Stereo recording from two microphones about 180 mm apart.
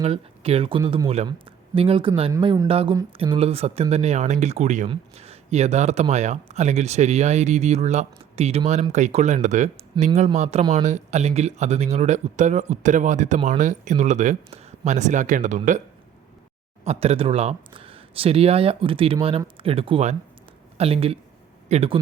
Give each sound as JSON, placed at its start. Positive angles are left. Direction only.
{"t": 0.0, "sound": "speech", "side_deg": -35}
{"t": 10.0, "sound": "speech", "side_deg": -25}
{"t": 10.3, "sound": "speech", "side_deg": -40}
{"t": 16.8, "sound": "speech", "side_deg": -35}